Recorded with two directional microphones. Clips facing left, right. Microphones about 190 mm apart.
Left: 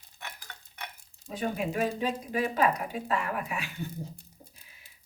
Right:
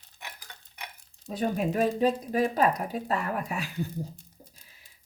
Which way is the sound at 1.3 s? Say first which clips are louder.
Right 3 dB; 40° right (ahead or behind).